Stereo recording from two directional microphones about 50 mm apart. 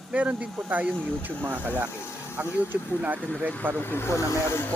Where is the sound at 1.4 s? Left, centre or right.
Right.